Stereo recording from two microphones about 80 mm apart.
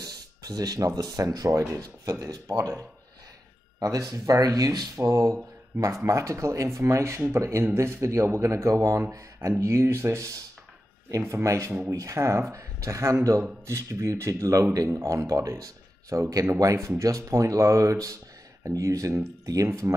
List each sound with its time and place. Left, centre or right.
0.0 s speech: right
3.8 s speech: right